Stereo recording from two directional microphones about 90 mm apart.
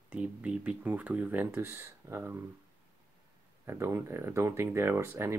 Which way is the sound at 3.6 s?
30° right (ahead or behind).